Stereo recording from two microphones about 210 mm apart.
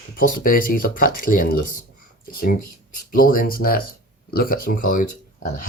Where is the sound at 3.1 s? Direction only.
40° left (ahead or behind).